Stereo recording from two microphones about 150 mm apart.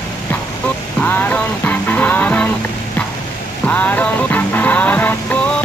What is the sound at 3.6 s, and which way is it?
Music, 10° left (ahead or behind).